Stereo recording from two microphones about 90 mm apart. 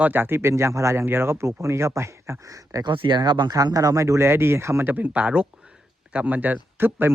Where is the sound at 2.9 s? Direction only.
60° right (ahead or behind).